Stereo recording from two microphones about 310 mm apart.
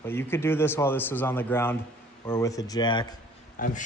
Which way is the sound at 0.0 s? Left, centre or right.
Centre.